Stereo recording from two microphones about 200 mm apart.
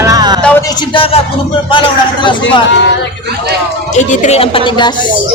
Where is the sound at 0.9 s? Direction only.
25° left (ahead or behind).